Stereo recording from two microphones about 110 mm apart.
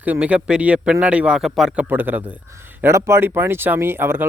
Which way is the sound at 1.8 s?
15° right (ahead or behind).